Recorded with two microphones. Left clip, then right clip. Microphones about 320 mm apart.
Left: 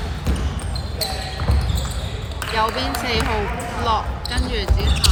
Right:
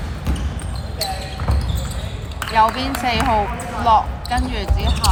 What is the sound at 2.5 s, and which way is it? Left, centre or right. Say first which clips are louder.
Basketball bounce: right 5 dB; right.